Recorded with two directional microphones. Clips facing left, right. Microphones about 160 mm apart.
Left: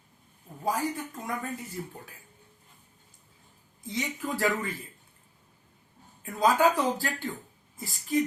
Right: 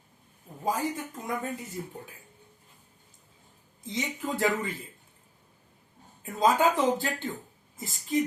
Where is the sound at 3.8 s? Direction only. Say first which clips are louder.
Even; 20° right (ahead or behind).